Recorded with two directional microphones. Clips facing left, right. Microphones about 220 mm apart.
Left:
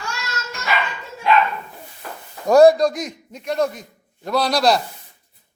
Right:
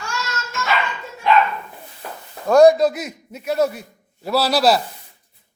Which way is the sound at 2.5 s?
Centre (ahead or behind).